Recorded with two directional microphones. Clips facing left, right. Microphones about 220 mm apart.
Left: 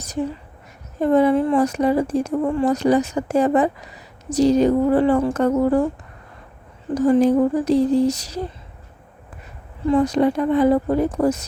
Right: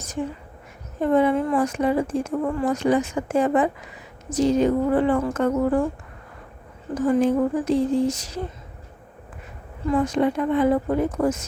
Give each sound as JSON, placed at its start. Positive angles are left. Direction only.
{"t": 1.0, "sound": "speech", "side_deg": 35}
{"t": 6.9, "sound": "speech", "side_deg": 40}
{"t": 10.0, "sound": "speech", "side_deg": 35}